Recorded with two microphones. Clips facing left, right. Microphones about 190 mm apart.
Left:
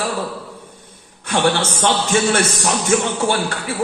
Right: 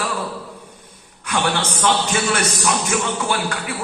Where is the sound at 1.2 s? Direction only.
30° left (ahead or behind).